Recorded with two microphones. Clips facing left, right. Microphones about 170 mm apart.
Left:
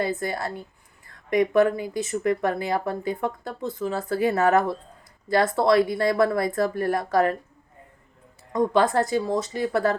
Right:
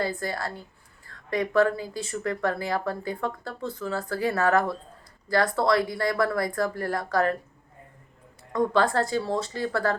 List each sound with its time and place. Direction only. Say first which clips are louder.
0.0 s speech: left 3 dB; 20° left (ahead or behind)
8.5 s speech: left 2 dB; 20° left (ahead or behind)